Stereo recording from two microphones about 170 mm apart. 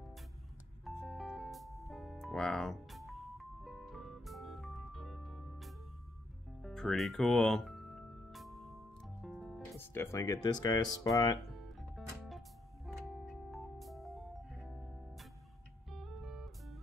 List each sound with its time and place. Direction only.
0.8 s music: centre (ahead or behind)
9.8 s speech: 15° left (ahead or behind)
12.3 s music: centre (ahead or behind)
15.9 s music: centre (ahead or behind)